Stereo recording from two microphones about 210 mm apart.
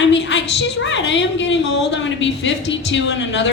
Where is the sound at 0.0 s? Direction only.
60° left (ahead or behind).